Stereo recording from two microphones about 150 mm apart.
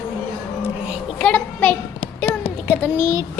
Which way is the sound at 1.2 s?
10° left (ahead or behind).